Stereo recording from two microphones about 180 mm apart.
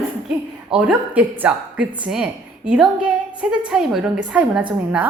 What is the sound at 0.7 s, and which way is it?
A woman's voice, 5° right (ahead or behind).